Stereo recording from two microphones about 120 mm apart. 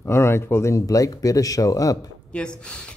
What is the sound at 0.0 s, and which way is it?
Speech, 20° left (ahead or behind).